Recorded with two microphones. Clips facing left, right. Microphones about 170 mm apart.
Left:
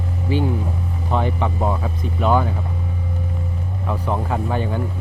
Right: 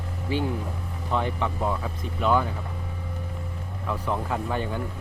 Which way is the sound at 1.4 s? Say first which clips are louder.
Left 5 dB; 35° left (ahead or behind).